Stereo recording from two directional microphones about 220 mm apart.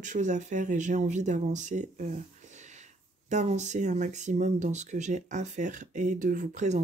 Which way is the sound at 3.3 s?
30° right (ahead or behind).